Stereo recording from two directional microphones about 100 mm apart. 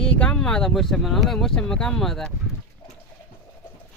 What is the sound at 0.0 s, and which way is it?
Speech, 10° left (ahead or behind).